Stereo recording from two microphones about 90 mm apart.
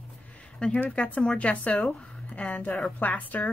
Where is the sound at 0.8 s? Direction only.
15° left (ahead or behind).